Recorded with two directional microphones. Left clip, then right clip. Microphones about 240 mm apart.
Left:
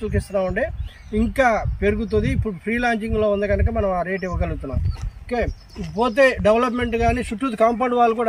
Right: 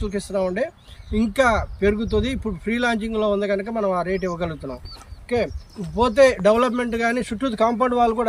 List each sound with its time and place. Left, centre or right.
0.0 s a man's voice: centre
6.1 s a man's voice: centre